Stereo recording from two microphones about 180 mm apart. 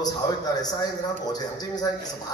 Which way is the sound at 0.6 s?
20° left (ahead or behind).